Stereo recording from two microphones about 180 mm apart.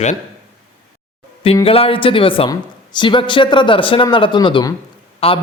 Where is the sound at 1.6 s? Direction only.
30° left (ahead or behind).